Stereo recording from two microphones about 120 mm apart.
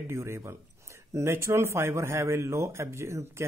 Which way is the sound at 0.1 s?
25° right (ahead or behind).